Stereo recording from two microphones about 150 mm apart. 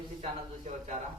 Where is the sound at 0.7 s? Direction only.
55° right (ahead or behind).